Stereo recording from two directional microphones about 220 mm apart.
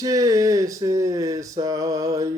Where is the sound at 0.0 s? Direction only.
15° right (ahead or behind).